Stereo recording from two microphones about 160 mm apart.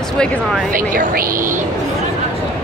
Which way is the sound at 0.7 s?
60° right (ahead or behind).